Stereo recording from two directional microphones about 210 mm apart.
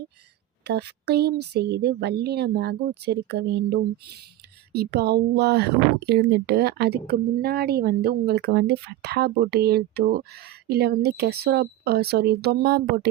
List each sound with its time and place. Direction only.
0.7 s speech: 50° right (ahead or behind)